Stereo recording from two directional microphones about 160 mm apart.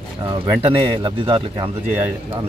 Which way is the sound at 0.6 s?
35° right (ahead or behind).